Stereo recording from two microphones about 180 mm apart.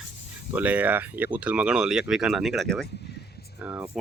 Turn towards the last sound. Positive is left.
turn(degrees=-10)  # may be behind; listen again after turning